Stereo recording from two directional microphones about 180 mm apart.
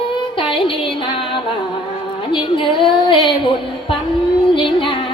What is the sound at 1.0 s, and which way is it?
Music, 30° left (ahead or behind).